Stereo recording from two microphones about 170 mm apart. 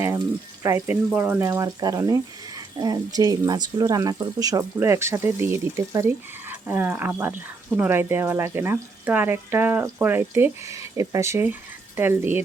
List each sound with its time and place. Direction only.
0.6 s speech: 15° right (ahead or behind)